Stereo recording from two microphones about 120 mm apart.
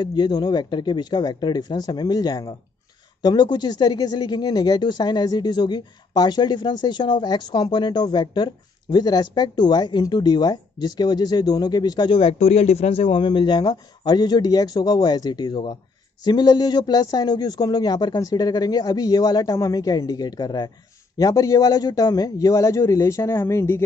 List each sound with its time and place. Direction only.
0.0 s speech: 35° left (ahead or behind)
12.2 s a man's voice: 55° left (ahead or behind); by 23.8 s 20° left (ahead or behind)